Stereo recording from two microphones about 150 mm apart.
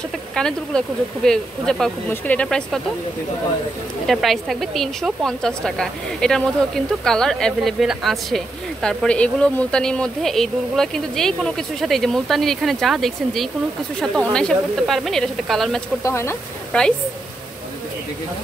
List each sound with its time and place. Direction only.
0.3 s speech: 5° left (ahead or behind)
4.1 s speech: centre (ahead or behind)
16.0 s speech: 20° left (ahead or behind)